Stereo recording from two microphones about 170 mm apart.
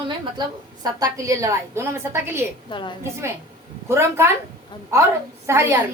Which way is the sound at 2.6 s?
30° left (ahead or behind).